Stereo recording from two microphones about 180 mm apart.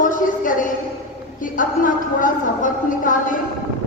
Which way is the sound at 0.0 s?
45° left (ahead or behind).